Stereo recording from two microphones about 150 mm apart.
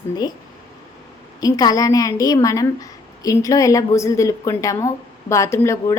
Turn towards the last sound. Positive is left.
turn(degrees=20)  # may be behind; listen again after turning